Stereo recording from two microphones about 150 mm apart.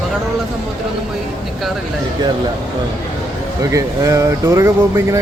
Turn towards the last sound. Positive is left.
turn(degrees=-20)  # may be behind; listen again after turning